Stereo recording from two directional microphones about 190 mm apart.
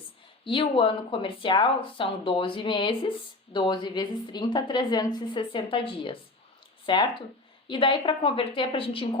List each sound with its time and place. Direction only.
0.4 s speech: 25° left (ahead or behind)